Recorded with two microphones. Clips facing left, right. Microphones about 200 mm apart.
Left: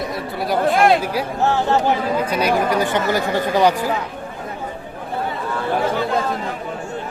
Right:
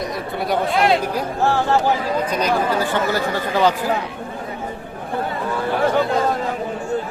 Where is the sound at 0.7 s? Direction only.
50° left (ahead or behind).